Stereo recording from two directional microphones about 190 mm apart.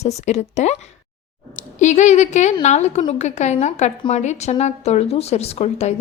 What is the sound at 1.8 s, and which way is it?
Speech, 40° left (ahead or behind).